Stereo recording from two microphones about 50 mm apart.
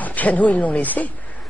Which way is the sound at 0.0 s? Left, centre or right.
Left.